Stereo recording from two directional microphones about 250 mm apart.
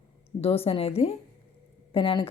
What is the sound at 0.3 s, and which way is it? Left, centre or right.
Speech, left.